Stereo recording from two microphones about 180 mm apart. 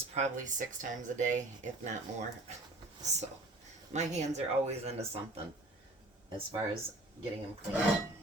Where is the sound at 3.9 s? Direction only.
40° right (ahead or behind).